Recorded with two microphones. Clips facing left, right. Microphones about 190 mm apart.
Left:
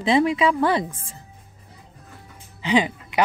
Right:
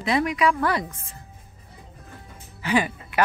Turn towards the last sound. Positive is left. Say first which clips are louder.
# left 3 dB
turn(degrees=20)  # may be behind; listen again after turning